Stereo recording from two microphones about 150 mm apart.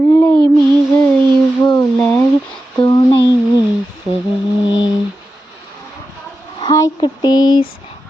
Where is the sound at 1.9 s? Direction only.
10° left (ahead or behind).